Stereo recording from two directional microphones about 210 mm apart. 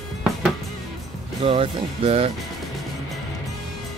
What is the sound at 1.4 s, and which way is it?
Speech, 25° right (ahead or behind).